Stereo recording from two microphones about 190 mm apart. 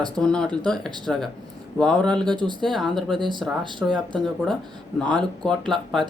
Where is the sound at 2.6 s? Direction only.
Centre (ahead or behind).